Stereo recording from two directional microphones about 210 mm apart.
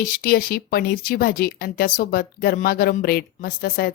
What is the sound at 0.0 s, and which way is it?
A woman's voice, 45° left (ahead or behind).